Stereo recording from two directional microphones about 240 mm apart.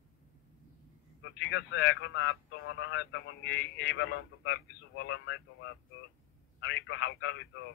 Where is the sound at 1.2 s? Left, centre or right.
Left.